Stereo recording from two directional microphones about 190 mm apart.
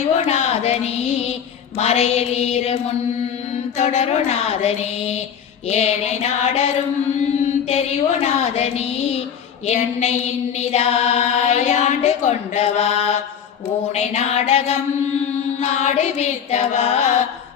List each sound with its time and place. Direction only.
0.3 s music: 35° left (ahead or behind)